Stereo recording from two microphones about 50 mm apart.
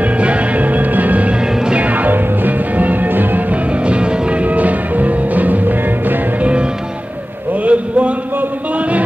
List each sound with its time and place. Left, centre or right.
0.0 s music: right
1.6 s music: right
1.9 s music: right
3.8 s music: right
7.6 s a sound: right
8.4 s music: right